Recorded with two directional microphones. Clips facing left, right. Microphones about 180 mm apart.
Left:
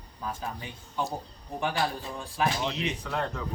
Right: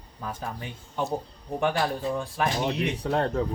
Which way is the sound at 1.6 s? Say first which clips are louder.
Right 4 dB; 60° right (ahead or behind).